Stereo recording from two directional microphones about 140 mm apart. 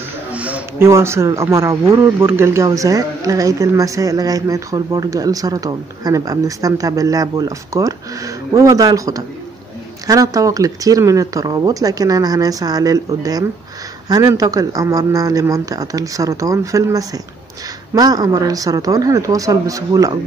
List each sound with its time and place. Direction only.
0.3 s speech: 10° right (ahead or behind)